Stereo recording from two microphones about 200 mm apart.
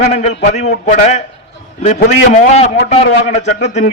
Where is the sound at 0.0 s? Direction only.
35° left (ahead or behind).